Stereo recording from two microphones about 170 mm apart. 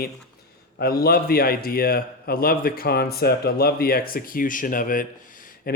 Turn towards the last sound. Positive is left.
turn(degrees=60)  # may be behind; listen again after turning